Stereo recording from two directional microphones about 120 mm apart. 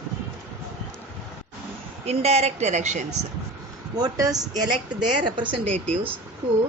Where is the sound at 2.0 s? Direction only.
60° right (ahead or behind); by 3.0 s 85° right.